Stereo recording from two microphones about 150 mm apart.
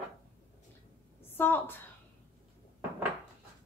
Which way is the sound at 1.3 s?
15° left (ahead or behind).